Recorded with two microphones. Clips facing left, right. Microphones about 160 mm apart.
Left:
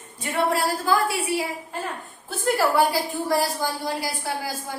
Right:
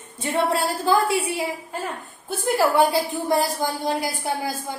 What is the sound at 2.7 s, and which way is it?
Speech, 20° right (ahead or behind).